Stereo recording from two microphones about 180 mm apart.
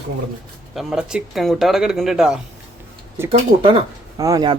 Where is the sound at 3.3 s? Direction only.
30° right (ahead or behind).